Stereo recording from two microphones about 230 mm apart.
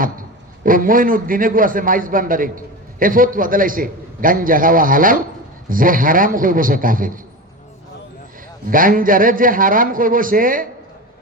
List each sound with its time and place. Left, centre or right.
0.0 s a man's voice: right
8.7 s a man's voice: right